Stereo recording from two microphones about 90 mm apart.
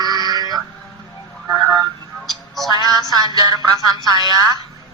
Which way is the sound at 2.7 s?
45° right (ahead or behind).